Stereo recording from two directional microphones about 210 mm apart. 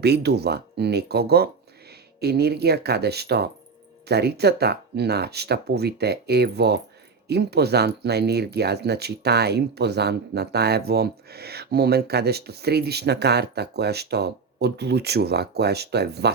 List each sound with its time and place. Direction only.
0.0 s speech: 50° right (ahead or behind)